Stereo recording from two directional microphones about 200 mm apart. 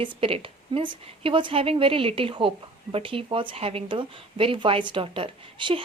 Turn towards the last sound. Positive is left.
turn(degrees=-25)  # may be behind; listen again after turning